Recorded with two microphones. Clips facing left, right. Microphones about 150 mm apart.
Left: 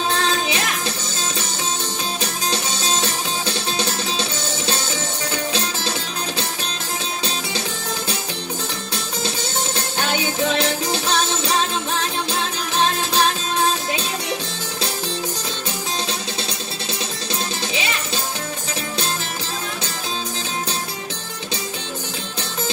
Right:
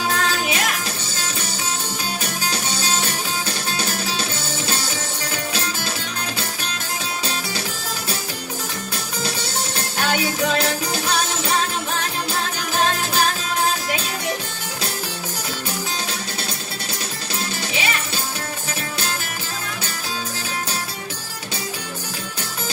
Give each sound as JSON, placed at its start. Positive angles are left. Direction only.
{"t": 0.1, "sound": "music", "side_deg": 25}
{"t": 2.4, "sound": "music", "side_deg": 30}
{"t": 9.8, "sound": "music", "side_deg": 25}